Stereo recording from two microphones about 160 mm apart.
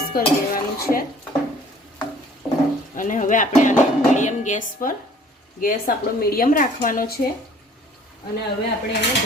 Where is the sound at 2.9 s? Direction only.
55° left (ahead or behind).